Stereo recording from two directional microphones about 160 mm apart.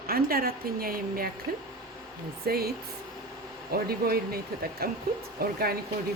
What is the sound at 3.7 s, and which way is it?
Speech, 70° right (ahead or behind).